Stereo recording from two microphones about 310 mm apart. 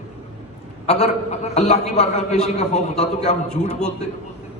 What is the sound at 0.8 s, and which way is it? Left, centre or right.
A man's voice, left.